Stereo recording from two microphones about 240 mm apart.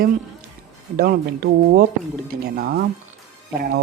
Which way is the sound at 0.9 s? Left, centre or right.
Right.